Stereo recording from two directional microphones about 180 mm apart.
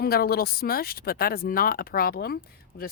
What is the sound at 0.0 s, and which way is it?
Speech, 60° left (ahead or behind).